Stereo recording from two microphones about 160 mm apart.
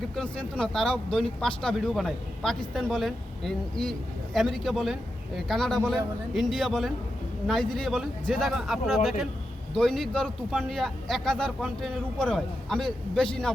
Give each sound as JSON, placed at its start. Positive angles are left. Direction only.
{"t": 0.2, "sound": "a man's voice", "side_deg": 5}